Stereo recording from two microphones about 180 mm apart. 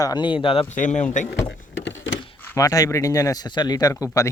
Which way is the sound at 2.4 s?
15° left (ahead or behind).